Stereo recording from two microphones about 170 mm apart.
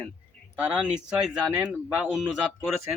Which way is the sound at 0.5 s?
5° right (ahead or behind).